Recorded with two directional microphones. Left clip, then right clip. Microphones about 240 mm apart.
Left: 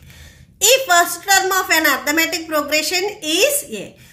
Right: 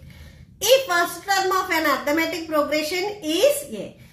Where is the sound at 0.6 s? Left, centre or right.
Left.